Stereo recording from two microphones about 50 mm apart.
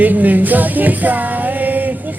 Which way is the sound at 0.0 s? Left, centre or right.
Right.